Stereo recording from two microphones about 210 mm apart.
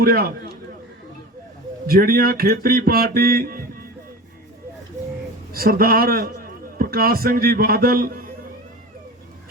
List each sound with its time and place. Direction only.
0.0 s speech: 45° right (ahead or behind)
1.9 s speech: 45° right (ahead or behind)
5.5 s a man's voice: 45° right (ahead or behind)